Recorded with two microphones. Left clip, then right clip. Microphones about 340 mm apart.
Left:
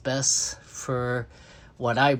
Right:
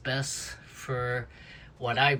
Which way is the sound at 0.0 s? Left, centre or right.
Centre.